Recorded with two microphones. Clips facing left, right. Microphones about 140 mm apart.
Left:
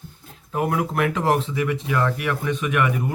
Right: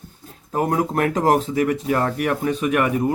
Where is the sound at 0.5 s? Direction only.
35° right (ahead or behind).